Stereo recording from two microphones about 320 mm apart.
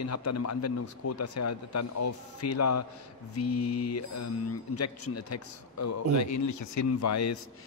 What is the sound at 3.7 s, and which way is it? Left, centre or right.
Speech, left.